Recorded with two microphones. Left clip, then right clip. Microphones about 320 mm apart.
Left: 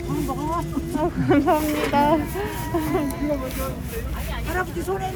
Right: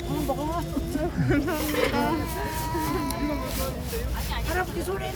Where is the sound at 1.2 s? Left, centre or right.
Centre.